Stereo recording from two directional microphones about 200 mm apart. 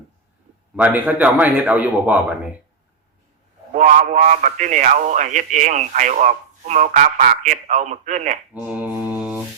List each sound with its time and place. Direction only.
0.8 s a man's voice: 10° right (ahead or behind)
3.8 s a man's voice: 40° right (ahead or behind)
8.5 s mantra: 10° right (ahead or behind)